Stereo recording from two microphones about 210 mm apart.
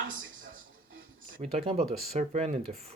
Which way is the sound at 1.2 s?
30° right (ahead or behind).